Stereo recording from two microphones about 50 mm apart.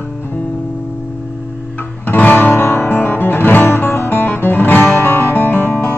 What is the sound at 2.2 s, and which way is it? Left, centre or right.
Music, left.